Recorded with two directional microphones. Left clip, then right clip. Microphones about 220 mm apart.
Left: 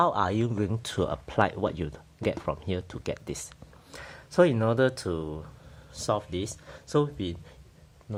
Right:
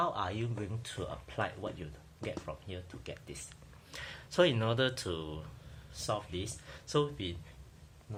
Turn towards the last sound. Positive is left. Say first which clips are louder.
# left 6 dB
turn(degrees=40)  # may be behind; listen again after turning